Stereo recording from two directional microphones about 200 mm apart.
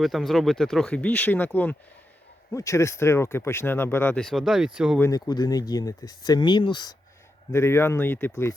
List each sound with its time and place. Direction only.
0.0 s speech: centre (ahead or behind)
4.9 s speech: 15° left (ahead or behind)